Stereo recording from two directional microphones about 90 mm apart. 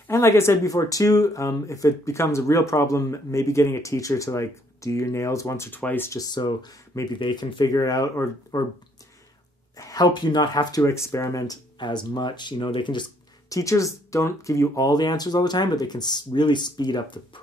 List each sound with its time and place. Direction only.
0.1 s speech: 30° left (ahead or behind)
5.7 s speech: 20° left (ahead or behind)
6.1 s speech: 50° left (ahead or behind)
9.8 s speech: 45° left (ahead or behind)
11.8 s speech: 55° left (ahead or behind)
13.5 s speech: 40° left (ahead or behind)
14.9 s speech: 50° left (ahead or behind)